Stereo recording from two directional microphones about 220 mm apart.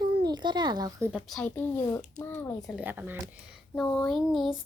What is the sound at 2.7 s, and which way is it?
Speech, 10° right (ahead or behind).